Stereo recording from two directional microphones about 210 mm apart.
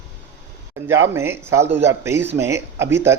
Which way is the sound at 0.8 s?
10° right (ahead or behind).